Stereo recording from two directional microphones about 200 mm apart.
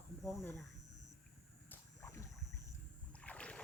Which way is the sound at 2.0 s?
15° left (ahead or behind).